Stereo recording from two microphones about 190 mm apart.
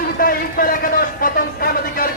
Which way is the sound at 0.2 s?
50° left (ahead or behind).